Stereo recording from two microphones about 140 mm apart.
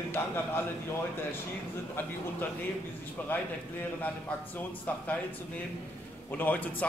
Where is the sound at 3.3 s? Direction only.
15° left (ahead or behind).